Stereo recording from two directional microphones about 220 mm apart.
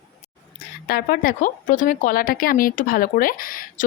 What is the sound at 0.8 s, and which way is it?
Speech, 45° left (ahead or behind).